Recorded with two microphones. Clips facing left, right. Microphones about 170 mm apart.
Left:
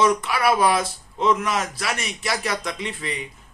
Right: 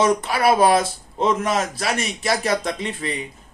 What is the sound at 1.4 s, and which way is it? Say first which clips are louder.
Speech: right 3 dB; 35° right (ahead or behind).